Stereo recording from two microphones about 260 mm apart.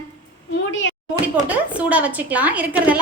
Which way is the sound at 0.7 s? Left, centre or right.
Left.